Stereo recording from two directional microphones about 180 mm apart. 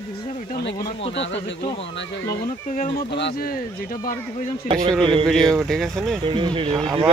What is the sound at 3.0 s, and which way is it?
Speech, 75° left (ahead or behind).